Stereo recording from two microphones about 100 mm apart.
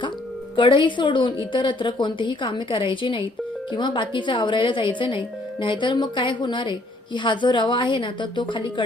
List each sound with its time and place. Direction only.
0.5 s speech: 55° left (ahead or behind)